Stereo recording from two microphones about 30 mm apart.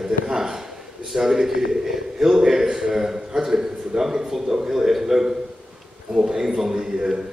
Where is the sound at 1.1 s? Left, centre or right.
Centre.